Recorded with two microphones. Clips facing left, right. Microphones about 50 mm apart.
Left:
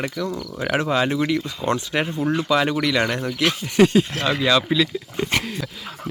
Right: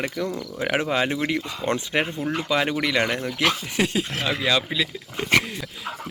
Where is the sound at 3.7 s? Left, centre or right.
Centre.